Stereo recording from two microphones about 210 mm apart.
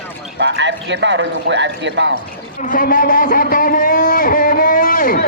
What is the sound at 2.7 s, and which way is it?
Speech, 40° left (ahead or behind).